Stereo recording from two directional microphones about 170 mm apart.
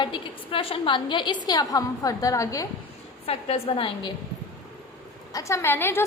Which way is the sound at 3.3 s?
35° left (ahead or behind).